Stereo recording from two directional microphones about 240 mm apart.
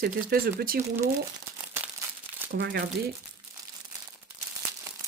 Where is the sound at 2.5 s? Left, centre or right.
Right.